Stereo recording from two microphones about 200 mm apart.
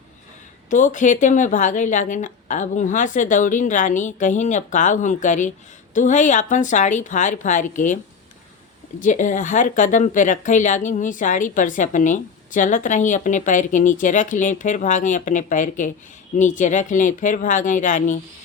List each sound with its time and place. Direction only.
0.7 s speech: 40° left (ahead or behind)
9.0 s speech: 40° left (ahead or behind)